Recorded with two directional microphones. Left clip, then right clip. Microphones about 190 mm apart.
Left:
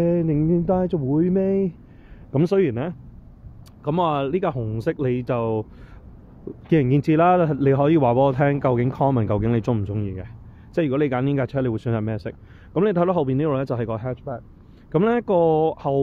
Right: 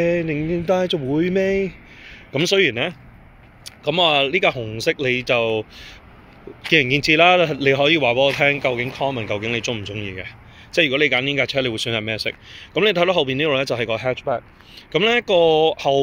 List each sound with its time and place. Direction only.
0.0 s speech: centre (ahead or behind)
7.2 s speech: 5° left (ahead or behind)
8.9 s speech: 30° left (ahead or behind)
9.5 s speech: 10° left (ahead or behind)